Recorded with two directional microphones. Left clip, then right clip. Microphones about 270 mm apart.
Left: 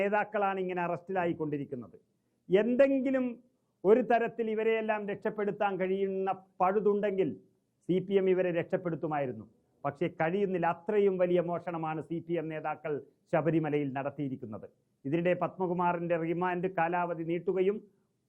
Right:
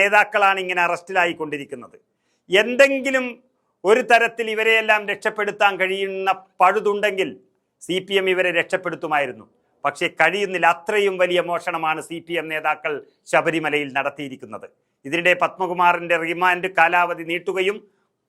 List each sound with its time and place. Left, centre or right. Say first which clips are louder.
0.0 s a man's voice: right 14 dB; centre